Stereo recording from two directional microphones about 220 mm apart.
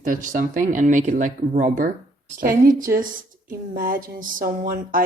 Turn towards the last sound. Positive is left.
turn(degrees=-40)  # may be behind; listen again after turning